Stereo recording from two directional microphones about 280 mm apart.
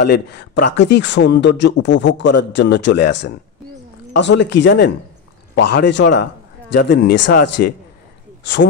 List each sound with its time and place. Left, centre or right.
0.0 s speech: left